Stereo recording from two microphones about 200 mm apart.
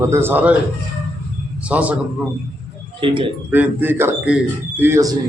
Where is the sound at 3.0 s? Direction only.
25° right (ahead or behind).